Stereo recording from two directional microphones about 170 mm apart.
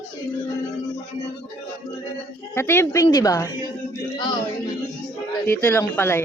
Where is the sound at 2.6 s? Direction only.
15° left (ahead or behind).